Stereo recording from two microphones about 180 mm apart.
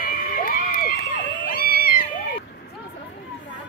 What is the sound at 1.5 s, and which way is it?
Cat, 55° left (ahead or behind).